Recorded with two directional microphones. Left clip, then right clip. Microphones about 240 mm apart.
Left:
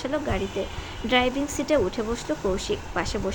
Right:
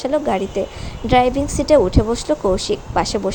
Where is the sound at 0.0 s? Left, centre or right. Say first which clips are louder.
Right 9 dB; centre.